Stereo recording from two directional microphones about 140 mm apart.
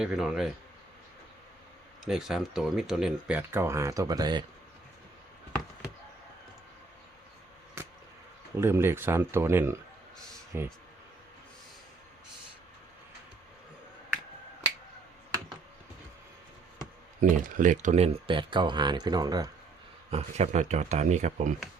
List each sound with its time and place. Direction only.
0.0 s speech: 5° right (ahead or behind)
2.0 s speech: 5° right (ahead or behind); by 4.4 s 30° right (ahead or behind)
7.8 s a sound: 15° right (ahead or behind)
8.5 s speech: 15° right (ahead or behind)
17.2 s speech: 70° right (ahead or behind); by 18.3 s 50° right (ahead or behind)
18.3 s speech: 35° right (ahead or behind)
20.1 s speech: 50° right (ahead or behind)